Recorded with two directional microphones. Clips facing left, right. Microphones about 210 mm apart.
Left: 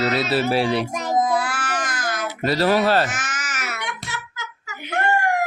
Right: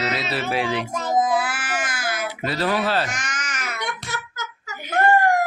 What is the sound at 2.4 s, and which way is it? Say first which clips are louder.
Speech: left 5 dB; 40° left (ahead or behind).